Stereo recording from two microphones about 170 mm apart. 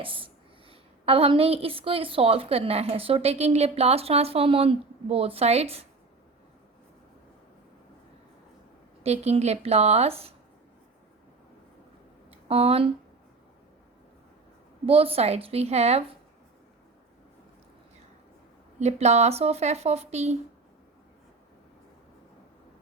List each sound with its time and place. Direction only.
0.0 s a woman's voice: 30° right (ahead or behind)
9.0 s a woman's voice: 40° right (ahead or behind)
12.5 s a woman's voice: 35° right (ahead or behind)
14.8 s a woman's voice: 35° right (ahead or behind)
18.8 s a woman's voice: 40° right (ahead or behind)